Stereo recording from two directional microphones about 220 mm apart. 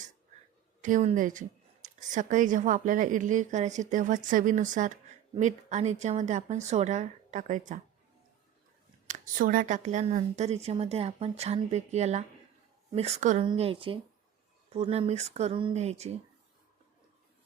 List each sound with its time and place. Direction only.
0.8 s a woman's voice: 35° right (ahead or behind)
9.0 s a woman's voice: 35° right (ahead or behind)